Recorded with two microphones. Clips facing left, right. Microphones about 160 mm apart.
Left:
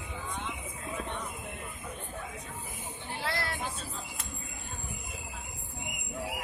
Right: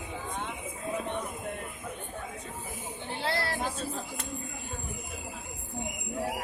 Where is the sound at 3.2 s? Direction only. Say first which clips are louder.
Right 4 dB; 30° right (ahead or behind).